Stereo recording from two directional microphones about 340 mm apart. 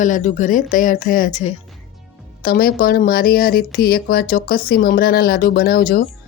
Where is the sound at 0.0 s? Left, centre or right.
Left.